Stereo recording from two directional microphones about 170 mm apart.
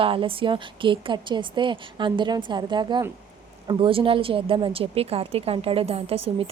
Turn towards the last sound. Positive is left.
turn(degrees=-35)  # may be behind; listen again after turning